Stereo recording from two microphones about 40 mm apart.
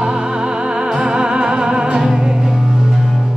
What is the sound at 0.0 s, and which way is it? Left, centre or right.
Music, centre.